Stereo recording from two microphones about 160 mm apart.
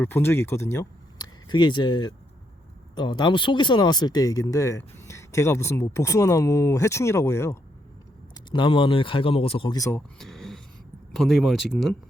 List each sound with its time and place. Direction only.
0.0 s speech: 15° left (ahead or behind)
1.5 s speech: 30° left (ahead or behind)
8.4 s speech: 30° left (ahead or behind)
9.7 s speech: 20° left (ahead or behind)
10.2 s a sound: centre (ahead or behind)
11.1 s speech: centre (ahead or behind)